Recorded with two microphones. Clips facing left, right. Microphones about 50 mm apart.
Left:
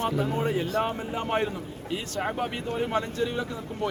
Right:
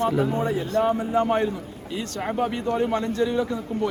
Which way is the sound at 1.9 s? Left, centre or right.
Centre.